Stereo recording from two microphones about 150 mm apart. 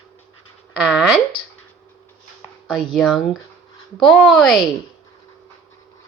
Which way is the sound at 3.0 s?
Centre (ahead or behind).